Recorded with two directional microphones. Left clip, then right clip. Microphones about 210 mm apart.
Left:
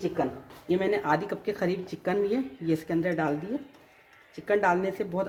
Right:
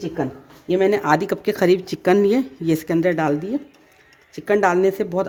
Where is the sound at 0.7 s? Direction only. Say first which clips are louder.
Right 8 dB; 55° right (ahead or behind).